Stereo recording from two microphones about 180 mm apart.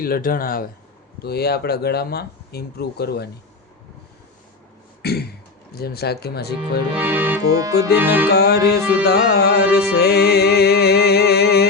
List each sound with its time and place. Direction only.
0.0 s speech: 55° left (ahead or behind)
1.2 s music: 60° left (ahead or behind)
5.0 s a sound: 65° left (ahead or behind)
5.7 s music: 60° left (ahead or behind)
6.9 s accordion: 10° right (ahead or behind)
8.3 s music: 60° left (ahead or behind)